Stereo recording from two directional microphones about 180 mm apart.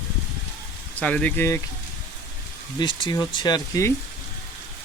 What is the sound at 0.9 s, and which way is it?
Speech, 5° left (ahead or behind).